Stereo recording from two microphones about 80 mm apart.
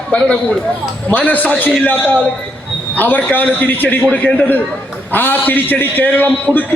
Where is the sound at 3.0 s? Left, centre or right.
Left.